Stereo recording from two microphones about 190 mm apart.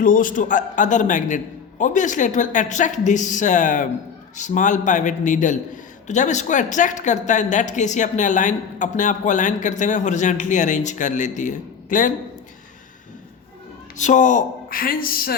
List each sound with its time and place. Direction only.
0.0 s a man's voice: 45° left (ahead or behind)
13.9 s speech: 40° left (ahead or behind)